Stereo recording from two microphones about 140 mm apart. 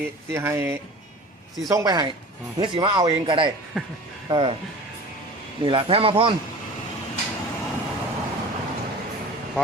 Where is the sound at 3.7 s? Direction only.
Centre (ahead or behind).